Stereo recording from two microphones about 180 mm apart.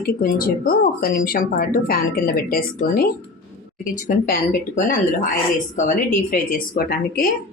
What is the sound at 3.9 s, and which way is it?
Speech, 45° left (ahead or behind).